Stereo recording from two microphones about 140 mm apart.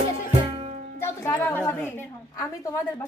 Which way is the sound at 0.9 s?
20° left (ahead or behind).